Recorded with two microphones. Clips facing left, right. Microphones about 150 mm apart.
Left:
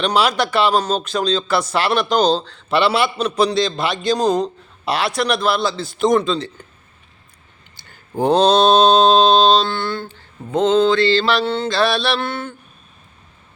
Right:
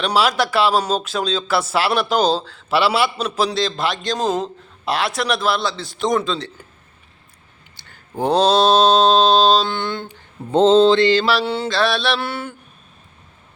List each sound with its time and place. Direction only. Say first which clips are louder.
0.0 s speech: left 1 dB; 5° right (ahead or behind)
7.8 s mantra: left 3 dB; centre (ahead or behind)
9.6 s mantra: left 1 dB; 15° right (ahead or behind)
10.5 s mantra: right 3 dB; 30° right (ahead or behind); by 11.7 s 10° right (ahead or behind)
11.7 s speech: left 1 dB; centre (ahead or behind)